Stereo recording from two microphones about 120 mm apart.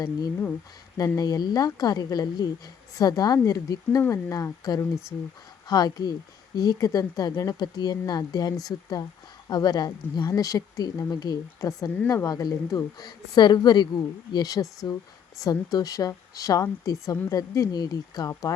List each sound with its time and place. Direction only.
0.0 s speech: 30° left (ahead or behind)